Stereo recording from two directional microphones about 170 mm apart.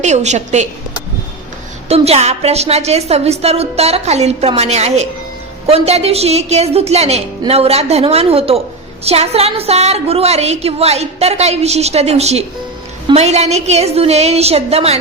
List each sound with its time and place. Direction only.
0.0 s a woman's voice: 40° right (ahead or behind)
1.9 s a woman's voice: 40° right (ahead or behind)